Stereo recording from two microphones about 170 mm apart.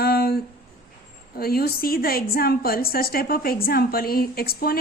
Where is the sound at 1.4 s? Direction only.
65° left (ahead or behind).